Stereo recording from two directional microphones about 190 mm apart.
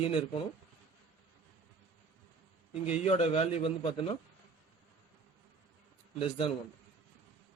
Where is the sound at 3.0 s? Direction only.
30° left (ahead or behind).